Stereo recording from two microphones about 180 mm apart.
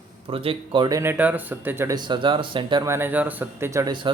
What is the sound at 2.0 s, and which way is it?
Speech, 25° right (ahead or behind).